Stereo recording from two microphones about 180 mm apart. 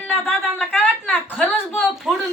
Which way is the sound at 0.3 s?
10° left (ahead or behind).